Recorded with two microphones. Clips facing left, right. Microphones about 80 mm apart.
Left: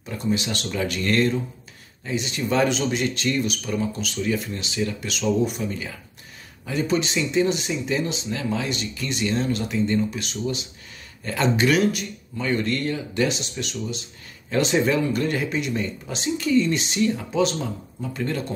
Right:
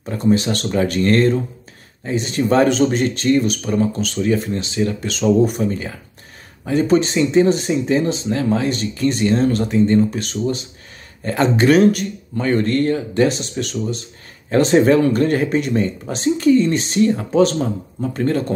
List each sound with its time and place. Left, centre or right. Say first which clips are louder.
0.1 s speech: right 8 dB; right